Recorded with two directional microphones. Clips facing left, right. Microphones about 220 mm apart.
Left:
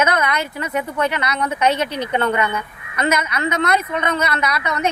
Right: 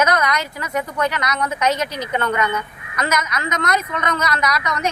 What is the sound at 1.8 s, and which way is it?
Speech, 60° left (ahead or behind).